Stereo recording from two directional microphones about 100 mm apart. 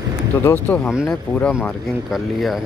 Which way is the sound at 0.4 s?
25° left (ahead or behind).